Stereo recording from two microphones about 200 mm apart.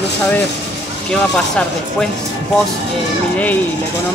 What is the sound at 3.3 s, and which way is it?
Speech, 10° left (ahead or behind).